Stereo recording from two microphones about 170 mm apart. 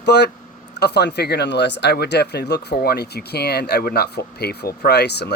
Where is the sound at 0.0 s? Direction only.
85° left.